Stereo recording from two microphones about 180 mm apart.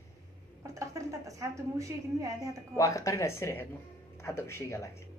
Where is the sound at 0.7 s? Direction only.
15° right (ahead or behind).